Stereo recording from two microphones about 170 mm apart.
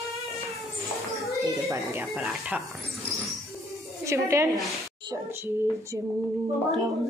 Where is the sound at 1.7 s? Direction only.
10° right (ahead or behind).